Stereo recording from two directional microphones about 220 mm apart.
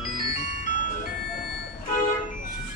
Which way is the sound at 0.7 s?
35° left (ahead or behind).